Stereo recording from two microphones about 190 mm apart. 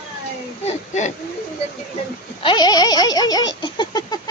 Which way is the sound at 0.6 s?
35° left (ahead or behind).